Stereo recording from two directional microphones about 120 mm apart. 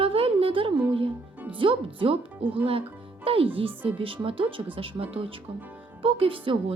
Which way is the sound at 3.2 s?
50° right (ahead or behind).